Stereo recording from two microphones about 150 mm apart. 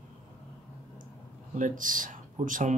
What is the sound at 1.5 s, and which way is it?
Speech, 60° right (ahead or behind).